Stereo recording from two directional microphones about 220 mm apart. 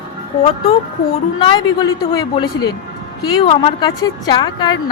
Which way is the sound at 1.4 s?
20° left (ahead or behind).